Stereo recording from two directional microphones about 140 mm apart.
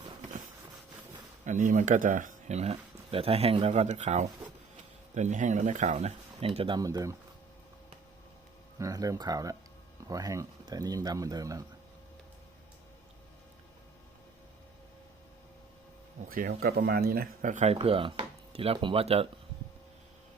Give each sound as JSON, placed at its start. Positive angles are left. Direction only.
{"t": 1.5, "sound": "speech", "side_deg": -65}
{"t": 6.7, "sound": "speech", "side_deg": -25}
{"t": 8.8, "sound": "speech", "side_deg": -25}
{"t": 16.3, "sound": "speech", "side_deg": -90}
{"t": 17.7, "sound": "speech", "side_deg": -40}